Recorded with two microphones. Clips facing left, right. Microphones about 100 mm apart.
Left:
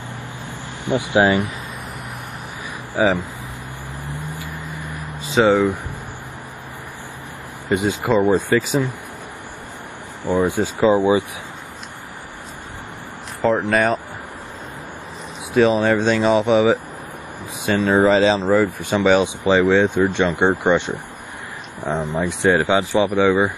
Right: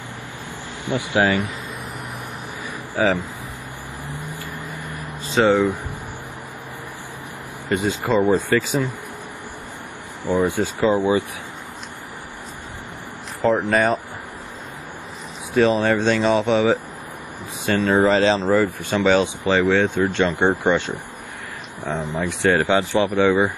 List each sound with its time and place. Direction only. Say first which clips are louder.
0.8 s speech: left 3 dB; 20° left (ahead or behind)
2.9 s speech: left 2 dB; 15° left (ahead or behind)
5.3 s speech: left 2 dB; centre (ahead or behind)
7.7 s speech: left 2 dB; 15° left (ahead or behind)
10.2 s speech: left 1 dB; 15° left (ahead or behind)
13.7 s speech: left 1 dB; centre (ahead or behind)
15.5 s speech: left 2 dB; 10° left (ahead or behind)
22.1 s speech: left 1 dB; 15° left (ahead or behind)